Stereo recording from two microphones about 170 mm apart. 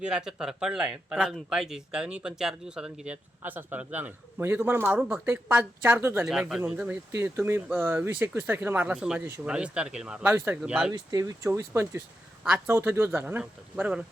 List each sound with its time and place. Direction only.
0.0 s speech: 5° right (ahead or behind)
6.2 s speech: 5° right (ahead or behind)
10.9 s speech: 20° right (ahead or behind)